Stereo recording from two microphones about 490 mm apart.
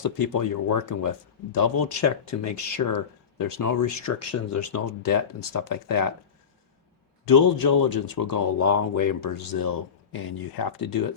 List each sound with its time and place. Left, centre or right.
0.0 s speech: left
7.3 s speech: left
8.5 s speech: left